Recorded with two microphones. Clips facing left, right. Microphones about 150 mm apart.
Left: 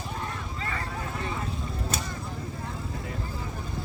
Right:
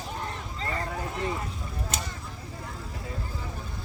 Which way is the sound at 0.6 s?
35° right (ahead or behind).